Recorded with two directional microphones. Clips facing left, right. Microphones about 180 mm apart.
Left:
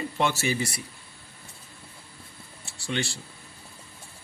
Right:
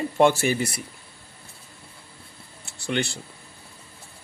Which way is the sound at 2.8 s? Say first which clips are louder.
Right 4 dB; 60° right (ahead or behind).